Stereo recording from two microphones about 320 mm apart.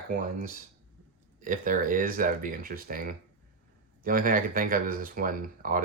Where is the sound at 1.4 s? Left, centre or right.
Right.